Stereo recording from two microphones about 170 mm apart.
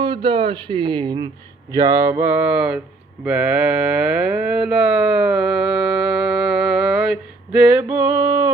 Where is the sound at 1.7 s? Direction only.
20° right (ahead or behind).